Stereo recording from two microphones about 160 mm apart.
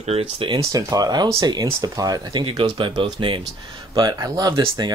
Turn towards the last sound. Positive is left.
turn(degrees=-25)  # may be behind; listen again after turning